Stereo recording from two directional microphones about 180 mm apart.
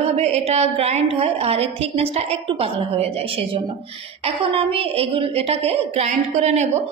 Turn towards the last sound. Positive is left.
turn(degrees=-40)  # may be behind; listen again after turning